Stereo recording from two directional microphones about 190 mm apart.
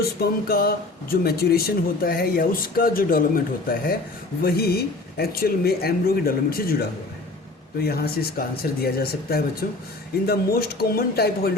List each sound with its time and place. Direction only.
0.0 s speech: 55° left (ahead or behind)